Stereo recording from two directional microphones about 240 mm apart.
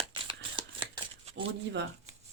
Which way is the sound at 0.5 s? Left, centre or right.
Right.